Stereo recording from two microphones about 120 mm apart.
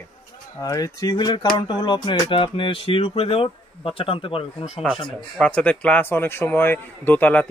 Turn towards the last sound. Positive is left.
turn(degrees=15)  # may be behind; listen again after turning